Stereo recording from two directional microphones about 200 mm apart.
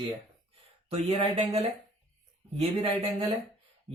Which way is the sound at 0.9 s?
30° right (ahead or behind).